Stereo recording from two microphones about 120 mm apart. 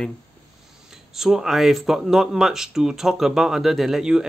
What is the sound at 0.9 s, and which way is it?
Speech, 5° right (ahead or behind).